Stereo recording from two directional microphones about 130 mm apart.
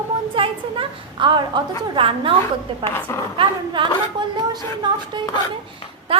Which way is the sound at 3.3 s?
40° right (ahead or behind).